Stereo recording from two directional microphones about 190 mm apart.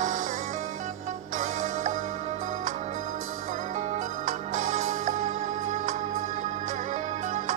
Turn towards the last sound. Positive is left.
turn(degrees=-40)  # may be behind; listen again after turning